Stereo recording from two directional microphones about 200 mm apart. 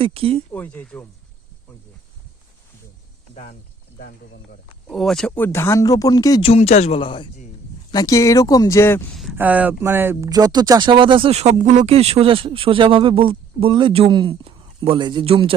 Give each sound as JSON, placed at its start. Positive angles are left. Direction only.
{"t": 0.0, "sound": "speech", "side_deg": -30}
{"t": 0.5, "sound": "speech", "side_deg": 10}
{"t": 3.3, "sound": "speech", "side_deg": 45}
{"t": 4.9, "sound": "speech", "side_deg": 0}
{"t": 6.5, "sound": "a man's voice", "side_deg": 35}
{"t": 9.3, "sound": "speech", "side_deg": -10}